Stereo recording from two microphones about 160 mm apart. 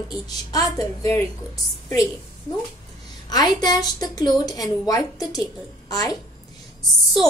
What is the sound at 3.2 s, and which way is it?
A child's voice, 25° left (ahead or behind).